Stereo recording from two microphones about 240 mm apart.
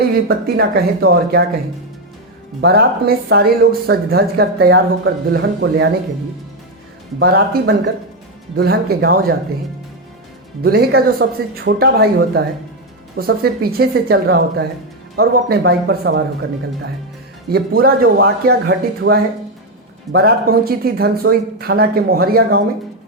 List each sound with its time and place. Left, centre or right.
0.1 s speech: right
2.6 s speech: right
7.2 s speech: right
10.6 s speech: right
17.5 s speech: right